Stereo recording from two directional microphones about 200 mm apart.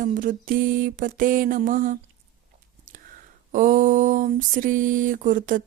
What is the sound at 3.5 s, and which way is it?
Mantra, 40° right (ahead or behind).